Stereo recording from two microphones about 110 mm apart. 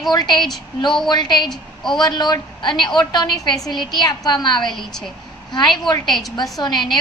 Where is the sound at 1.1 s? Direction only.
40° left (ahead or behind).